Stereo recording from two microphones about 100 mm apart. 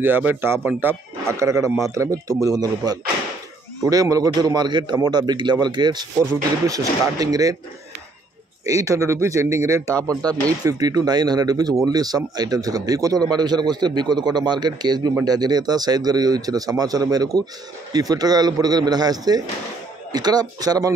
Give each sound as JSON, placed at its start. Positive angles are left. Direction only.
{"t": 0.0, "sound": "a man's voice", "side_deg": -20}
{"t": 6.7, "sound": "speech", "side_deg": -35}
{"t": 8.6, "sound": "a man's voice", "side_deg": -35}